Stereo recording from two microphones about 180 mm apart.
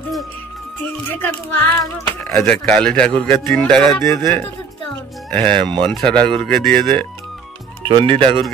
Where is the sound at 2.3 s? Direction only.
5° left (ahead or behind).